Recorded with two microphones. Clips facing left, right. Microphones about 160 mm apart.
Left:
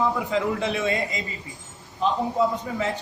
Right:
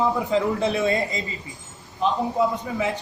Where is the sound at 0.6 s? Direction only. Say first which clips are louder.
Right 3 dB; 35° right (ahead or behind).